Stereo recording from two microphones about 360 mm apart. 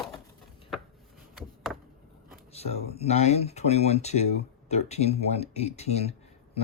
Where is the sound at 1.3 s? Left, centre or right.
Centre.